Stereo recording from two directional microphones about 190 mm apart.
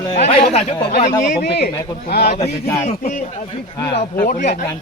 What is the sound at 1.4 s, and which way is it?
Speech, 55° left (ahead or behind).